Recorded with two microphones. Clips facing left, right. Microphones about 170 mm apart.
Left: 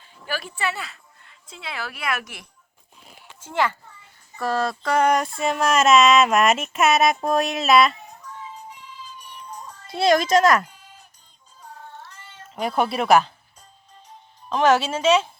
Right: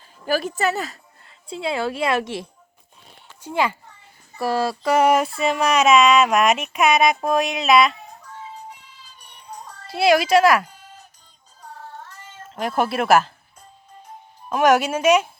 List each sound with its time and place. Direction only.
0.3 s speech: 40° right (ahead or behind)
1.5 s a woman's voice: 30° right (ahead or behind)
3.4 s speech: 15° right (ahead or behind)
9.9 s speech: 5° right (ahead or behind)
12.0 s cat: 45° right (ahead or behind)
12.5 s speech: centre (ahead or behind)
14.5 s speech: 10° right (ahead or behind)